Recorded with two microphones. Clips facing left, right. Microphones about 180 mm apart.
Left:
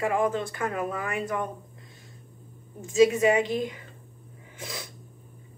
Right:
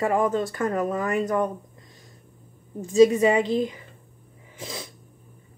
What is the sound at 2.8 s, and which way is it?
Speech, 35° right (ahead or behind).